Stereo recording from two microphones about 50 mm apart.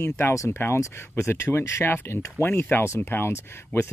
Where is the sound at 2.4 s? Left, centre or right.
Left.